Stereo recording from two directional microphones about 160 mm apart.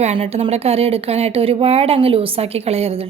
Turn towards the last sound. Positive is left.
turn(degrees=-40)  # may be behind; listen again after turning